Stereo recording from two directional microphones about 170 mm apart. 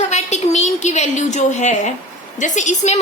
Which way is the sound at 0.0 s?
40° left (ahead or behind).